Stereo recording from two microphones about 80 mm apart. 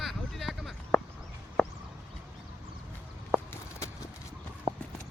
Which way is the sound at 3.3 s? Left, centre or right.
Centre.